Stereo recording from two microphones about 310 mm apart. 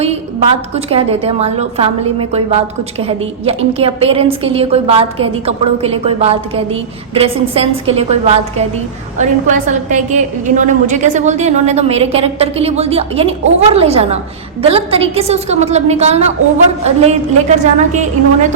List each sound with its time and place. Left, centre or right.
0.0 s a woman's voice: centre